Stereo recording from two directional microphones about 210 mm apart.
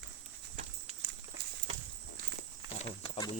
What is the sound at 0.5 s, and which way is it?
Horse, 35° right (ahead or behind).